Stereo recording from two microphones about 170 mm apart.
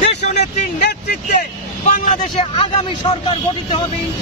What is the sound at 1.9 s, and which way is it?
A man's voice, 45° left (ahead or behind).